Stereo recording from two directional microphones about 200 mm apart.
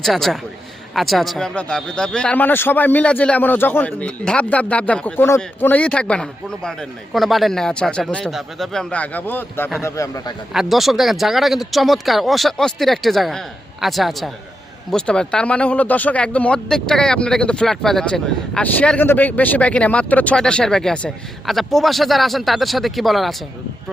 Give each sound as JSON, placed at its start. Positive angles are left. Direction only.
{"t": 0.0, "sound": "a man's voice", "side_deg": 0}
{"t": 10.5, "sound": "a man's voice", "side_deg": 0}